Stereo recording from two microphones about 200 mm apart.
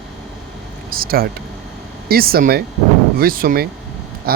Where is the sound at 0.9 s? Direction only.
45° right (ahead or behind).